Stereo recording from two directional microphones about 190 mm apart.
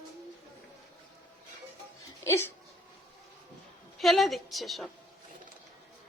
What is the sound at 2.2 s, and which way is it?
Speech, 15° left (ahead or behind).